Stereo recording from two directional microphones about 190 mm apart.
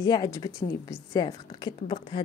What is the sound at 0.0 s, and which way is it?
A woman's voice, 20° left (ahead or behind).